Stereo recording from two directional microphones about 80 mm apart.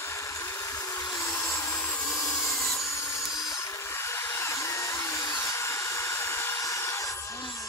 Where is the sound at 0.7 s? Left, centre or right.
Left.